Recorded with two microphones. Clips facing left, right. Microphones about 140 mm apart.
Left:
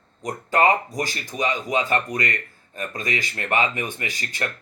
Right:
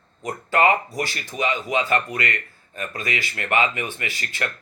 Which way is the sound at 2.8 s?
40° left (ahead or behind).